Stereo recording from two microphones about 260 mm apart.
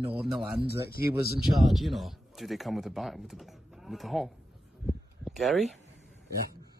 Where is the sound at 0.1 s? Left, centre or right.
Centre.